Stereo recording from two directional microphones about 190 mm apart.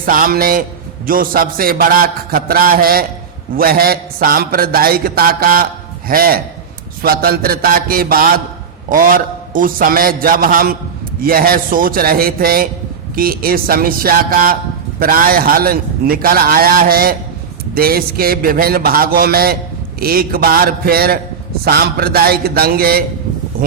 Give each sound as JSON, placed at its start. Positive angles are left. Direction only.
{"t": 0.0, "sound": "a man's voice", "side_deg": -45}